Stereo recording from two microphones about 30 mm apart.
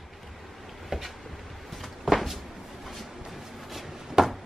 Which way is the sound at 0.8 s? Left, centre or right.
Centre.